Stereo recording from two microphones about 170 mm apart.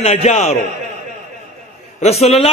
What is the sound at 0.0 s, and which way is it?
Speech, 40° left (ahead or behind).